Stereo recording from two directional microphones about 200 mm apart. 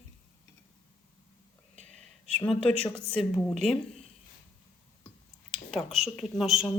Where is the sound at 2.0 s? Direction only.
5° left (ahead or behind).